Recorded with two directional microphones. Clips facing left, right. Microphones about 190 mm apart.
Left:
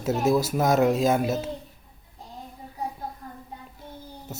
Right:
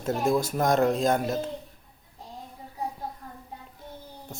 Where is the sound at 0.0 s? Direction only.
5° left (ahead or behind).